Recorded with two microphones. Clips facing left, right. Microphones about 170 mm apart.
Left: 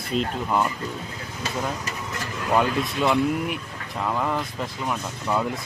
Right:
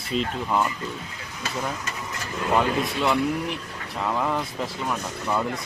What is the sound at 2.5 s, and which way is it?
Speech, centre (ahead or behind).